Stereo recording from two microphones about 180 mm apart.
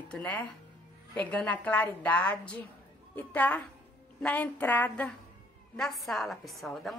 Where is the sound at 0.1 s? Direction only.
10° left (ahead or behind).